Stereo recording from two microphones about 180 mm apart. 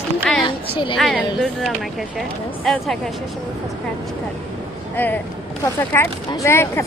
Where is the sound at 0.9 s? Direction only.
Centre (ahead or behind).